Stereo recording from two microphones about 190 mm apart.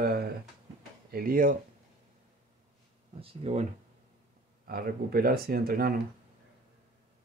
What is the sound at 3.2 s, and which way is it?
Speech, 35° right (ahead or behind).